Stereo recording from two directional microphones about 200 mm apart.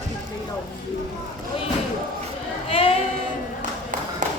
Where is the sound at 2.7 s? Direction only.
30° left (ahead or behind).